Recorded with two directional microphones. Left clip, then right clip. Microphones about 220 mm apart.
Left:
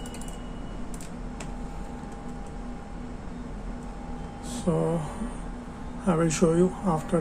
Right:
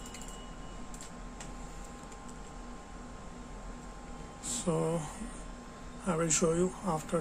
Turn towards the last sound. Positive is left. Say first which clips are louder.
# left 7 dB
turn(degrees=-10)  # may be behind; listen again after turning